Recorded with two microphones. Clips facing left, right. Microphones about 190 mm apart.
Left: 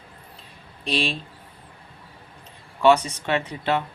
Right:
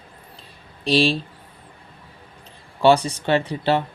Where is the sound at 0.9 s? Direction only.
35° right (ahead or behind).